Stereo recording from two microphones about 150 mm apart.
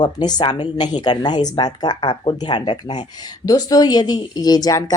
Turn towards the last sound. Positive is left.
turn(degrees=25)  # may be behind; listen again after turning